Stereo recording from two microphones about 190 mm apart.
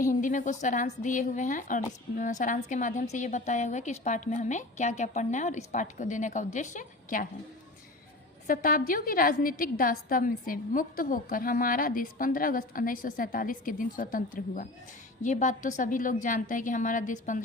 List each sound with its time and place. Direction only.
0.0 s a woman's voice: 45° left (ahead or behind)
8.4 s a woman's voice: 50° left (ahead or behind)